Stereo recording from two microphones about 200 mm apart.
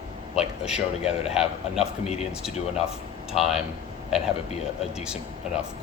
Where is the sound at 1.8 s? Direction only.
30° left (ahead or behind).